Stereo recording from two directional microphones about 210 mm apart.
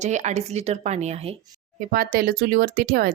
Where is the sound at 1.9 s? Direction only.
45° right (ahead or behind).